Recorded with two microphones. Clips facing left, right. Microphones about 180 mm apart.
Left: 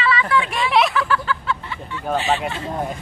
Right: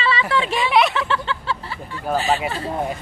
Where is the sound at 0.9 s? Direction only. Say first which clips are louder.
Left 2 dB; 25° right (ahead or behind).